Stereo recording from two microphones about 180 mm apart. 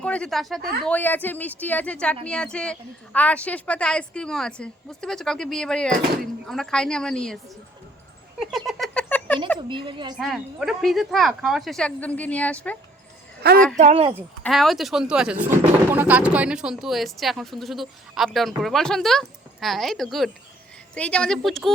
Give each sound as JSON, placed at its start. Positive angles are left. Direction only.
{"t": 0.0, "sound": "speech", "side_deg": 5}
{"t": 8.4, "sound": "cat", "side_deg": 0}
{"t": 9.0, "sound": "a sound", "side_deg": 10}
{"t": 9.6, "sound": "a woman's voice", "side_deg": -25}
{"t": 10.2, "sound": "speech", "side_deg": 0}
{"t": 13.7, "sound": "speech", "side_deg": -35}
{"t": 14.4, "sound": "speech", "side_deg": 0}